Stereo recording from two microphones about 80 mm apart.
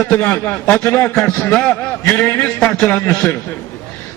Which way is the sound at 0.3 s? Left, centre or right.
Left.